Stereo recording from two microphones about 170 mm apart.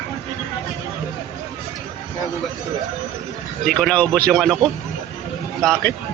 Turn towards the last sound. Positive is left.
turn(degrees=5)  # may be behind; listen again after turning